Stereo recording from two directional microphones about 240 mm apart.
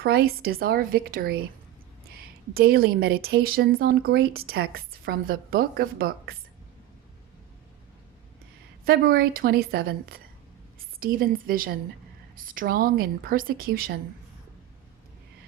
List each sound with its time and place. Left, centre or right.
0.0 s a woman's voice: right
8.8 s a woman's voice: right